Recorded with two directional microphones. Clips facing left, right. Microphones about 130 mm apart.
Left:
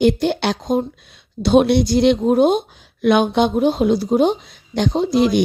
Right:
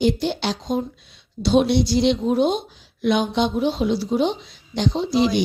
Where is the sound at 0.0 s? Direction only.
55° left (ahead or behind).